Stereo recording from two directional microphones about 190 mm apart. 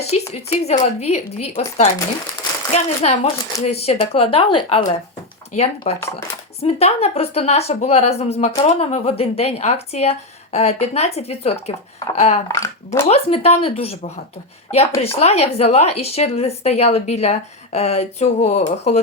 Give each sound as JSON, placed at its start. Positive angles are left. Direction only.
{"t": 0.0, "sound": "a woman's voice", "side_deg": 35}
{"t": 6.0, "sound": "speech", "side_deg": 15}
{"t": 6.6, "sound": "a woman's voice", "side_deg": 35}
{"t": 12.5, "sound": "speech", "side_deg": 15}
{"t": 13.1, "sound": "a woman's voice", "side_deg": 30}